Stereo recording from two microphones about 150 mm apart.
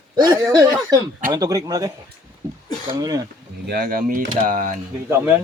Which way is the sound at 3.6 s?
80° right.